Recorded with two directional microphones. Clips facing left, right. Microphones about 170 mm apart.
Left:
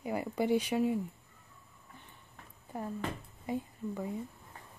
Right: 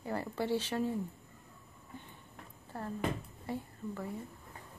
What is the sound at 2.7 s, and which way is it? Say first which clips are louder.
Speech: right 1 dB; 10° left (ahead or behind).